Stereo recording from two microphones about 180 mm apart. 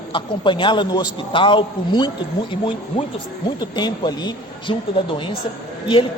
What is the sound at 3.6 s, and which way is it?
A man's voice, 25° left (ahead or behind).